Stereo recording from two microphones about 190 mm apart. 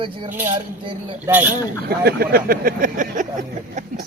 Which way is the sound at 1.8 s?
55° right (ahead or behind).